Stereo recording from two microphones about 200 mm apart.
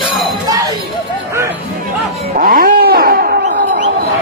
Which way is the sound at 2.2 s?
45° right (ahead or behind).